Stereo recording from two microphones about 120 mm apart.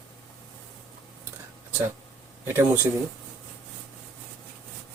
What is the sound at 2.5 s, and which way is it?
Speech, 20° right (ahead or behind).